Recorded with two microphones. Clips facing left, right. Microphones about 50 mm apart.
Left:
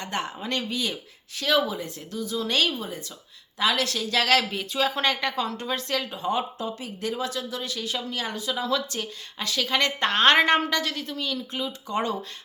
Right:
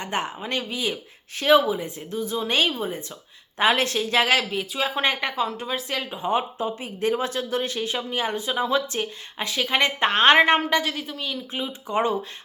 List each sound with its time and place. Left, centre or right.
0.0 s speech: right
1.4 s speech: right
4.4 s speech: centre
6.0 s speech: right
7.1 s speech: right; by 11.6 s centre
11.6 s speech: right